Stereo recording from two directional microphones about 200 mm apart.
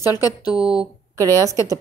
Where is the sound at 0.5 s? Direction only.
5° right (ahead or behind).